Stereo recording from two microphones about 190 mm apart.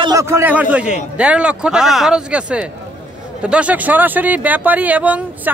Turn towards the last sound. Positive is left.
turn(degrees=-10)  # may be behind; listen again after turning